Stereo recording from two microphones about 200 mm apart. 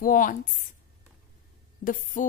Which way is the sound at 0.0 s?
45° left (ahead or behind).